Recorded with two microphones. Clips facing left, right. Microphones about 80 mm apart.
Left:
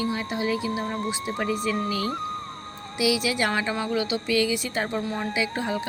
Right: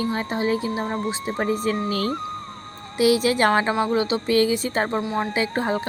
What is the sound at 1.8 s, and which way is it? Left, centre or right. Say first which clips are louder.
Speech: right 3 dB; right.